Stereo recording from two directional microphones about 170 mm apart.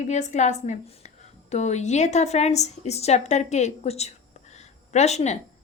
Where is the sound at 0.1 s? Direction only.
45° left (ahead or behind).